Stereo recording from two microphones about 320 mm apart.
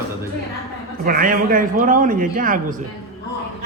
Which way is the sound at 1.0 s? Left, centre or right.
Right.